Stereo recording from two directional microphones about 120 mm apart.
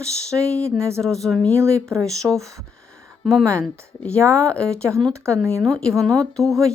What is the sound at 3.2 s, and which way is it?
Speech, 5° left (ahead or behind).